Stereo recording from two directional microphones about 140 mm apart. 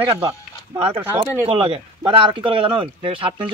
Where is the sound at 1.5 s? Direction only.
40° right (ahead or behind).